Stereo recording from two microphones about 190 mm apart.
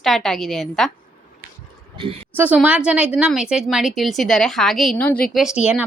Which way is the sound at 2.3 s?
10° right (ahead or behind).